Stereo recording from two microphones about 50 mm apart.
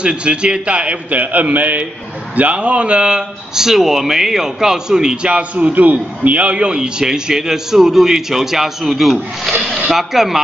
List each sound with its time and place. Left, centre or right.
0.0 s a man's voice: right